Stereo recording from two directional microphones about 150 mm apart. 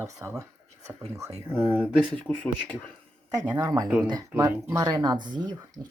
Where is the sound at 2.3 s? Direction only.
10° left (ahead or behind).